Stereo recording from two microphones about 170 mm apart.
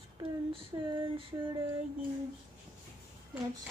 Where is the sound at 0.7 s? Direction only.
25° right (ahead or behind).